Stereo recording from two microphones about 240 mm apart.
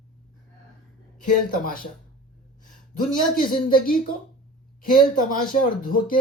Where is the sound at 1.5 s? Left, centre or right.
Left.